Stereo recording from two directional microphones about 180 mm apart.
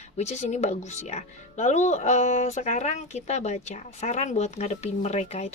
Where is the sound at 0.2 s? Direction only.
40° left (ahead or behind).